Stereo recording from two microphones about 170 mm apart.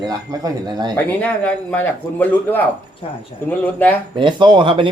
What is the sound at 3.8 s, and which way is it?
Speech, 10° left (ahead or behind).